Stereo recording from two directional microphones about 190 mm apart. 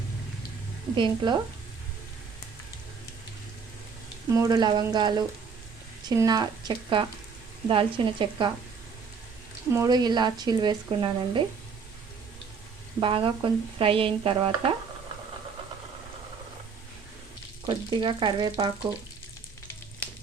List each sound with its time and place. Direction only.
0.9 s speech: 25° right (ahead or behind)
4.3 s speech: 20° right (ahead or behind)
9.7 s speech: 20° right (ahead or behind)
13.0 s speech: 25° right (ahead or behind)
17.7 s speech: 25° right (ahead or behind)